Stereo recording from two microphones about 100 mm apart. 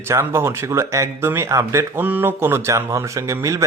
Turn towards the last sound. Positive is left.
turn(degrees=-30)  # may be behind; listen again after turning